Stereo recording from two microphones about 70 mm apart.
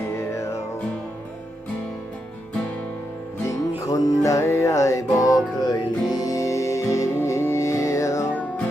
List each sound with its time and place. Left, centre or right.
0.2 s music: left
3.8 s music: left